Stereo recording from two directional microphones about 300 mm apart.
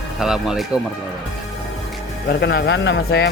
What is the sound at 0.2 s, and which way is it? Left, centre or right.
Speech, centre.